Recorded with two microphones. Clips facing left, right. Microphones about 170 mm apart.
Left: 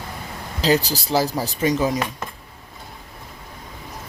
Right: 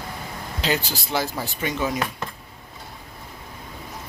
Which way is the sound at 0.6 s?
35° left (ahead or behind).